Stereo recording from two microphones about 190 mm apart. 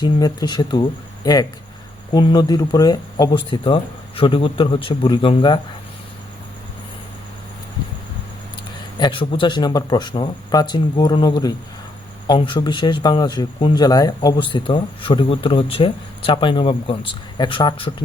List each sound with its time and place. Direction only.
0.0 s speech: 20° left (ahead or behind)
9.0 s speech: 25° left (ahead or behind)